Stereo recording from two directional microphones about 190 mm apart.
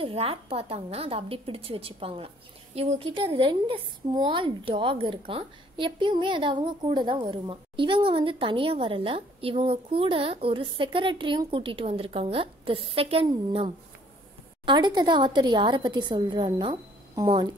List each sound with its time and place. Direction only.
0.0 s a woman's voice: 30° right (ahead or behind)